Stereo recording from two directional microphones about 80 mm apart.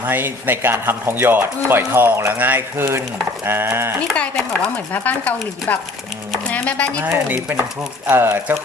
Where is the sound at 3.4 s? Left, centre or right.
Right.